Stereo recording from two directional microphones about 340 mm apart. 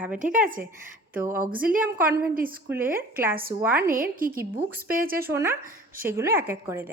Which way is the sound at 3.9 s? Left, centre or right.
Right.